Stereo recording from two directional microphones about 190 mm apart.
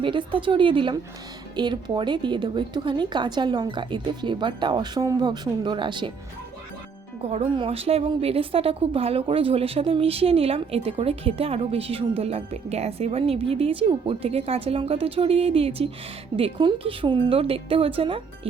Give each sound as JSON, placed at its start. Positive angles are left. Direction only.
{"t": 0.0, "sound": "a woman's voice", "side_deg": -25}
{"t": 7.2, "sound": "a woman's voice", "side_deg": -35}